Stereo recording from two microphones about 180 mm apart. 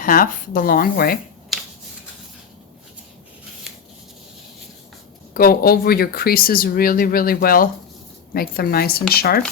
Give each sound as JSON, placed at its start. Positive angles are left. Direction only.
{"t": 0.0, "sound": "speech", "side_deg": 50}
{"t": 1.5, "sound": "a sound", "side_deg": 0}
{"t": 5.3, "sound": "speech", "side_deg": 55}